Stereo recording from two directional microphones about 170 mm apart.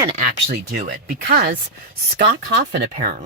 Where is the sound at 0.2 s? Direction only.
55° right (ahead or behind).